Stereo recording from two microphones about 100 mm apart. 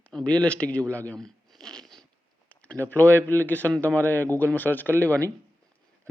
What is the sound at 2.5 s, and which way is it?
Speech, 15° left (ahead or behind).